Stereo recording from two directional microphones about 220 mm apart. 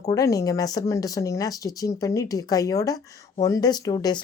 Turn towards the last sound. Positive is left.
turn(degrees=20)  # may be behind; listen again after turning